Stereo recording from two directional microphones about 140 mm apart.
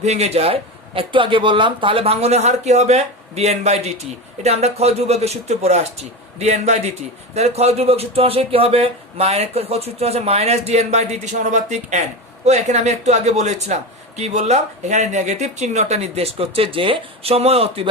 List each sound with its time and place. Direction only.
0.0 s speech: 50° right (ahead or behind)